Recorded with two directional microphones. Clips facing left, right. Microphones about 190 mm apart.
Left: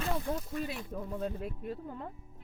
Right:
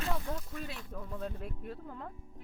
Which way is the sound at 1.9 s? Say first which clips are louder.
Left 2 dB; 15° left (ahead or behind).